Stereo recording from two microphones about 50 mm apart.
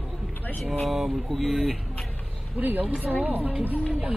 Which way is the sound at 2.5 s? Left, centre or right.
Right.